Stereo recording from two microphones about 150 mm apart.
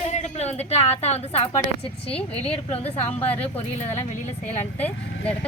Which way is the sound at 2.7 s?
40° left (ahead or behind).